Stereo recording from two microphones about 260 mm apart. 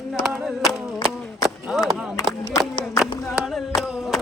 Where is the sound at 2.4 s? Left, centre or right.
Centre.